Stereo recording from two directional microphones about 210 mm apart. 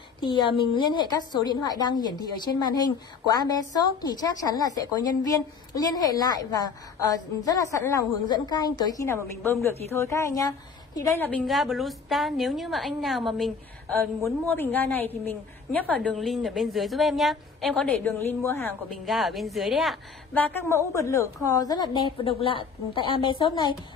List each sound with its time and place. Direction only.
0.2 s a woman's voice: 20° left (ahead or behind); by 20.4 s centre (ahead or behind)
20.6 s a woman's voice: 15° left (ahead or behind)